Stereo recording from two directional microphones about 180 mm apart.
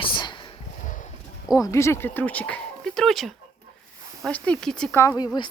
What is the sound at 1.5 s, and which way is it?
Speech, 15° left (ahead or behind).